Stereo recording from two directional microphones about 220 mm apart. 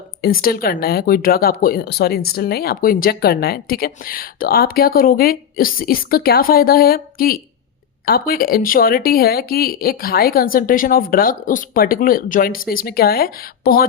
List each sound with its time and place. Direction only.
0.2 s speech: 40° left (ahead or behind)